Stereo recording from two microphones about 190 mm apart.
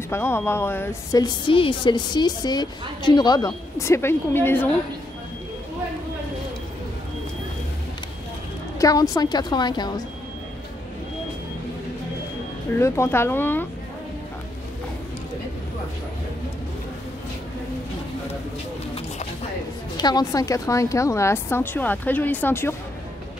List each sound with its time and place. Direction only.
0.1 s a woman's voice: 15° left (ahead or behind)
8.7 s a woman's voice: 20° left (ahead or behind)
12.7 s a woman's voice: 15° left (ahead or behind)
20.0 s a woman's voice: 20° left (ahead or behind)